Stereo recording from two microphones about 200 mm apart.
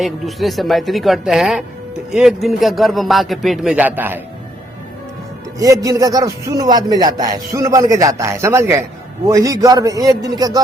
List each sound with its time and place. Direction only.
0.0 s speech: centre (ahead or behind)
5.5 s a man's voice: 15° right (ahead or behind)